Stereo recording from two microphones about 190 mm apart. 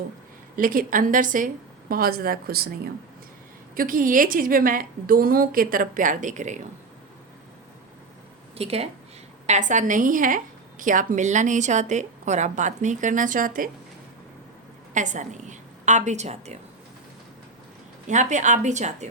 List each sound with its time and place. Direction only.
0.5 s a woman's voice: 45° right (ahead or behind)
3.8 s a woman's voice: 45° right (ahead or behind)
8.5 s a woman's voice: 30° right (ahead or behind)
14.9 s a woman's voice: 40° right (ahead or behind)
18.1 s a woman's voice: 40° right (ahead or behind)